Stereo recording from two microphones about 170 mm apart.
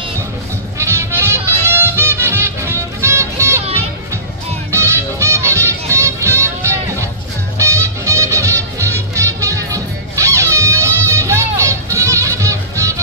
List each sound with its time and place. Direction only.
0.7 s music: 15° right (ahead or behind)
4.6 s music: 15° right (ahead or behind)